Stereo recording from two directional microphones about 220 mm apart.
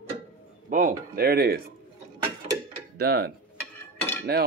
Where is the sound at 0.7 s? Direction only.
35° right (ahead or behind).